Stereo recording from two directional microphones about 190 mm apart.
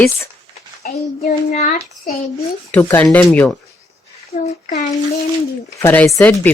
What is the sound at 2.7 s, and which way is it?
Speech, 10° left (ahead or behind).